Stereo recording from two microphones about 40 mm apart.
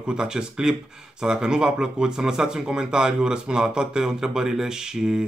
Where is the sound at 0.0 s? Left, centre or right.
Centre.